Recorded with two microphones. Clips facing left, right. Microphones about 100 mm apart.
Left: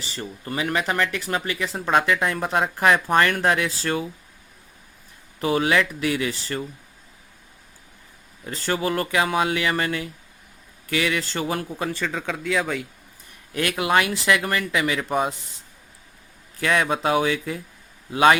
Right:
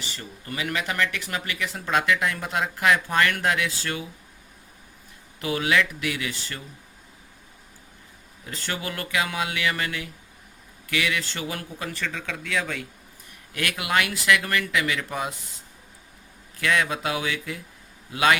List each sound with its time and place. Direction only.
0.0 s speech: 35° left (ahead or behind)
5.4 s speech: 35° left (ahead or behind)
8.4 s speech: 35° left (ahead or behind)
11.8 s speech: 25° left (ahead or behind)
16.6 s speech: 30° left (ahead or behind)